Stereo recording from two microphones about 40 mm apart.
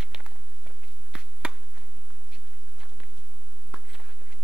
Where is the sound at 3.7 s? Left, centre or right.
Right.